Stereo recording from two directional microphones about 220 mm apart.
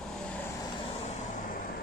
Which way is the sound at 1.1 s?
30° left (ahead or behind).